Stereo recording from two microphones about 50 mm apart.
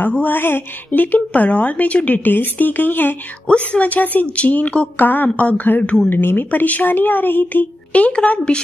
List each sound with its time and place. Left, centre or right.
0.1 s a woman's voice: left
3.4 s a woman's voice: left
6.0 s a woman's voice: left
7.9 s a woman's voice: left